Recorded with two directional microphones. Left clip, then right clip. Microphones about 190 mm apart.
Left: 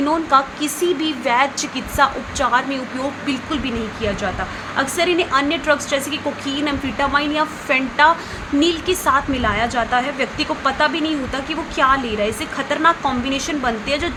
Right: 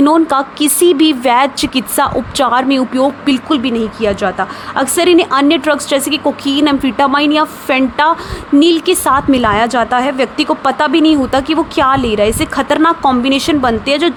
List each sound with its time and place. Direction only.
0.0 s speech: 50° right (ahead or behind)